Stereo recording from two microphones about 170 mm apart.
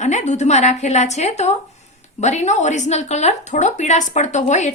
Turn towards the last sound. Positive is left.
turn(degrees=45)  # may be behind; listen again after turning